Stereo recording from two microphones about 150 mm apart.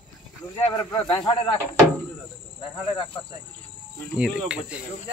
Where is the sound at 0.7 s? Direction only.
30° left (ahead or behind).